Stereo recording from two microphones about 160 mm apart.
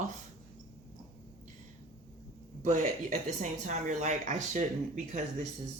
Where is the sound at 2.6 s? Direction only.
50° right (ahead or behind).